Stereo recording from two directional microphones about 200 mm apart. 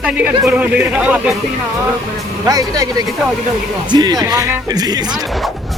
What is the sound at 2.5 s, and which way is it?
Speech, 20° right (ahead or behind).